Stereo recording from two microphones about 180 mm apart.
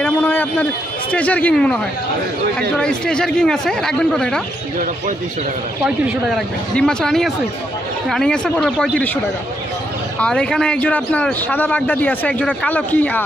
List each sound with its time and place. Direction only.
0.0 s a sound: 10° left (ahead or behind)
1.1 s a man's voice: 10° left (ahead or behind)
5.9 s a man's voice: 5° right (ahead or behind)